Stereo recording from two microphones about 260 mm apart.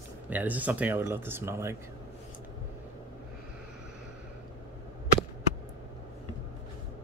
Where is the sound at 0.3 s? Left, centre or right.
Centre.